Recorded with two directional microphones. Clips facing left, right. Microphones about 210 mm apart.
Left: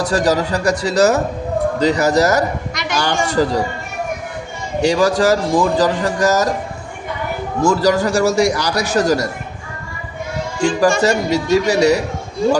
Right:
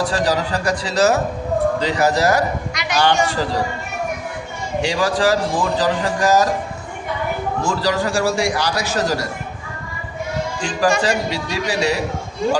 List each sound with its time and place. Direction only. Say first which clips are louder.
0.1 s a man's voice: left 3 dB; 45° left (ahead or behind)
4.8 s a man's voice: left 5 dB; 40° left (ahead or behind)
7.6 s a man's voice: left 7 dB; 45° left (ahead or behind)
10.6 s a man's voice: left 5 dB; 45° left (ahead or behind)